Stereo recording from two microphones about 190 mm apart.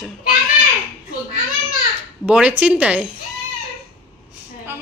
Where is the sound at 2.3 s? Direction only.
5° right (ahead or behind).